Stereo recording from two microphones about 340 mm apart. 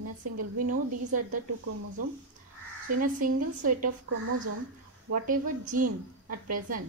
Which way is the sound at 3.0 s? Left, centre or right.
Right.